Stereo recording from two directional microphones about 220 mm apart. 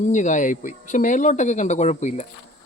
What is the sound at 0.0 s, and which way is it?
Speech, 35° left (ahead or behind).